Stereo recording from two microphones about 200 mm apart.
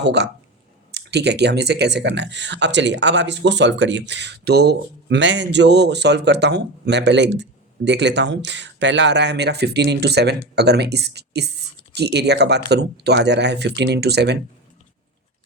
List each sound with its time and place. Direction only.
0.0 s speech: 60° right (ahead or behind)